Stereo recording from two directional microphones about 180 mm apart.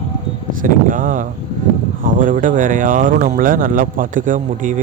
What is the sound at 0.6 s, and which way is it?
Speech, 45° right (ahead or behind).